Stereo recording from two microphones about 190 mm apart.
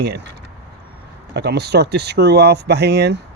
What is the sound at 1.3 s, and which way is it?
Speech, 60° right (ahead or behind).